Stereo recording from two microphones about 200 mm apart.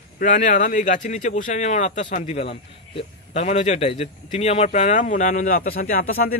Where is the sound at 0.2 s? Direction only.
40° left (ahead or behind).